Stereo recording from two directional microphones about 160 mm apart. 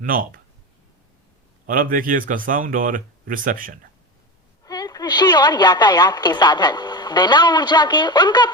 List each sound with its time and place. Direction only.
0.0 s speech: 60° right (ahead or behind)
1.6 s speech: 60° right (ahead or behind)
4.6 s a woman's voice: 25° left (ahead or behind)